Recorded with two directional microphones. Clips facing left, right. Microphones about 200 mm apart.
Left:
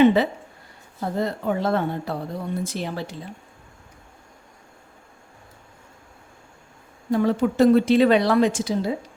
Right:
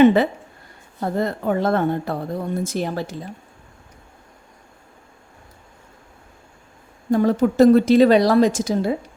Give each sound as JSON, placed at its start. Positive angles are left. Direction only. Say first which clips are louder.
{"t": 0.0, "sound": "speech", "louder": "right 3 dB", "side_deg": -50}
{"t": 7.1, "sound": "a woman's voice", "louder": "right 3 dB", "side_deg": -45}